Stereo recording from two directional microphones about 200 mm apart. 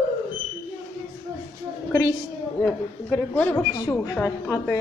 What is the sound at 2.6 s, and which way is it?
A woman's voice, 10° left (ahead or behind).